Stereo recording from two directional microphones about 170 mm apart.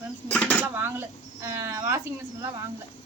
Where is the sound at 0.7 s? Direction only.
10° right (ahead or behind).